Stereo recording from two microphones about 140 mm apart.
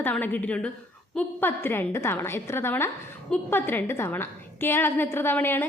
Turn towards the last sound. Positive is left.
turn(degrees=15)  # may be behind; listen again after turning